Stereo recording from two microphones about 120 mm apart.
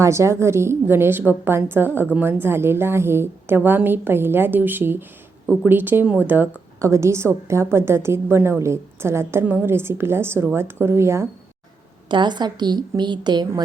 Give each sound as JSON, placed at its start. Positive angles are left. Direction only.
{"t": 0.0, "sound": "a woman's voice", "side_deg": -25}
{"t": 12.0, "sound": "a woman's voice", "side_deg": -40}